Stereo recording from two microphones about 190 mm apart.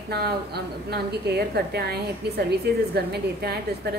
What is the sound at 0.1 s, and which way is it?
A woman's voice, 55° right (ahead or behind).